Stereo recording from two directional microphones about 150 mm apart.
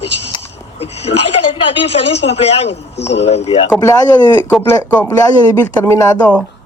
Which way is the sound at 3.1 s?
45° left (ahead or behind).